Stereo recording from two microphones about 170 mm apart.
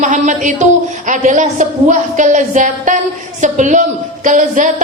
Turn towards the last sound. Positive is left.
turn(degrees=-50)  # may be behind; listen again after turning